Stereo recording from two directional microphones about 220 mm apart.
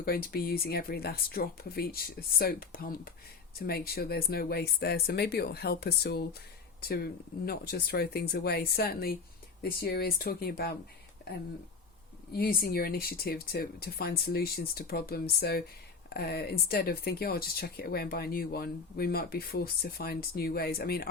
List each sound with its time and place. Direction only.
0.0 s speech: 45° left (ahead or behind)
12.3 s speech: 45° left (ahead or behind)